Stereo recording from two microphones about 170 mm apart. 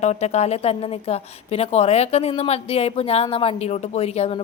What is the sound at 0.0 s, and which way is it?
A woman's voice, 40° left (ahead or behind).